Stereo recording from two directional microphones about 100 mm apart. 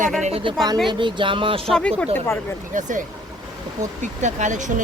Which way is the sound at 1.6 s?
5° left (ahead or behind).